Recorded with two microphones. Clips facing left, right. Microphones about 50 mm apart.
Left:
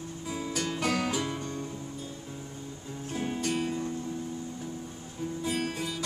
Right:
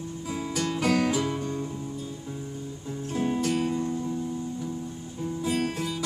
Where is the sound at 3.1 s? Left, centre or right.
Centre.